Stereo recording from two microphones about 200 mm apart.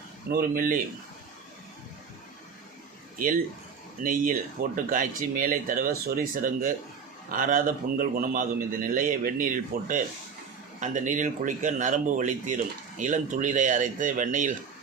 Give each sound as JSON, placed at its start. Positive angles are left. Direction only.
{"t": 0.3, "sound": "a man's voice", "side_deg": -45}
{"t": 4.0, "sound": "a man's voice", "side_deg": -40}